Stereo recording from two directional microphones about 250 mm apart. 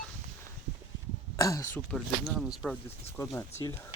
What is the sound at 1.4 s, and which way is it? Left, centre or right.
Speech, centre.